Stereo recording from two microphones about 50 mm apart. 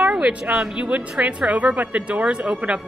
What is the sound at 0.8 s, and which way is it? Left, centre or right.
A woman's voice, right.